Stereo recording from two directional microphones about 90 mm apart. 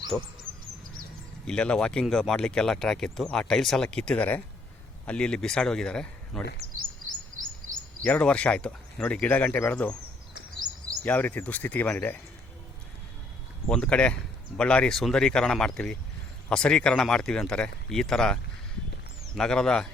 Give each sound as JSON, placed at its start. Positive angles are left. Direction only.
{"t": 0.1, "sound": "speech", "side_deg": 35}
{"t": 1.5, "sound": "speech", "side_deg": 10}
{"t": 8.0, "sound": "speech", "side_deg": 15}
{"t": 11.0, "sound": "speech", "side_deg": 15}
{"t": 13.7, "sound": "speech", "side_deg": 10}
{"t": 19.4, "sound": "speech", "side_deg": 5}